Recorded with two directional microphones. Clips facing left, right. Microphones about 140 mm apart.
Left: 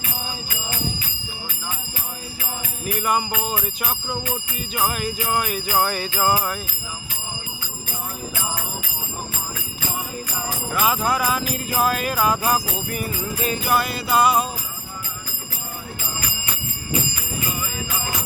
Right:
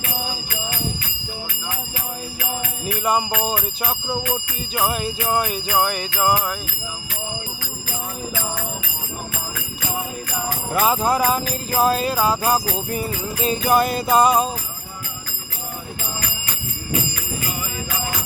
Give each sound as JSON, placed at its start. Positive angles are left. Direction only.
{"t": 2.8, "sound": "jingle bell", "side_deg": -30}
{"t": 5.7, "sound": "jingle bell", "side_deg": -15}
{"t": 10.7, "sound": "jingle bell", "side_deg": -30}